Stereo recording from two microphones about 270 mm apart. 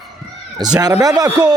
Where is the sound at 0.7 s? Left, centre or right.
Centre.